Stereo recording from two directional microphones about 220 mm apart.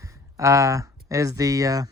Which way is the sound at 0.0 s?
15° right (ahead or behind).